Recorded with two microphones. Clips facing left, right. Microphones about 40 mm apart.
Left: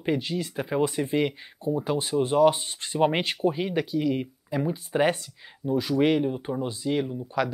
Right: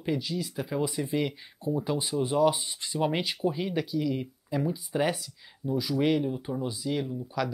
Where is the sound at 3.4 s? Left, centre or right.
Left.